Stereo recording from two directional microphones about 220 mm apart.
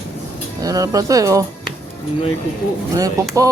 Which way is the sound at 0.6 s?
15° right (ahead or behind).